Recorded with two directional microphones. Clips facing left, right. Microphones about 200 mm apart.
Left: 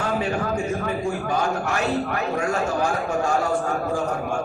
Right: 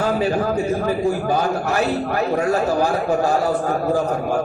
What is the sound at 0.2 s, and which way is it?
A man's voice, 35° right (ahead or behind).